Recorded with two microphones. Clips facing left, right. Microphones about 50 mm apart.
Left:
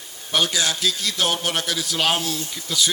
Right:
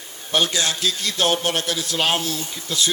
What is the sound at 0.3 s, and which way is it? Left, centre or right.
A man's voice, right.